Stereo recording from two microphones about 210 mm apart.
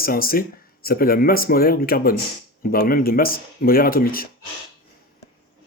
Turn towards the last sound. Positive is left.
turn(degrees=45)  # may be behind; listen again after turning